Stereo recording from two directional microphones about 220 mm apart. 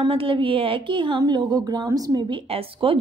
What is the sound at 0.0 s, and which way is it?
A woman's voice, 25° right (ahead or behind).